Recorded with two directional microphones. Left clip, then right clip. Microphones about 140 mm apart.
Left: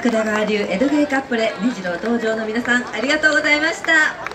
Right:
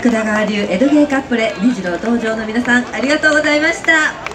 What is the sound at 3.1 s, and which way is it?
A woman's voice, 35° left (ahead or behind).